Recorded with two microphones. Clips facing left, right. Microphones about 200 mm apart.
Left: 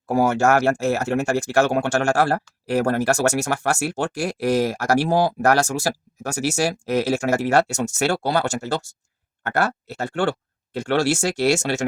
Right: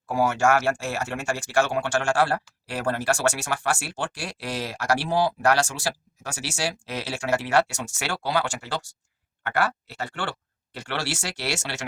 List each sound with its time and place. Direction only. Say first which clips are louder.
0.1 s speech: left 4 dB; 40° left (ahead or behind)